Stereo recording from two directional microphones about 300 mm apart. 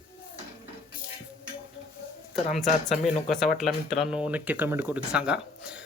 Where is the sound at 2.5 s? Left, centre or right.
Centre.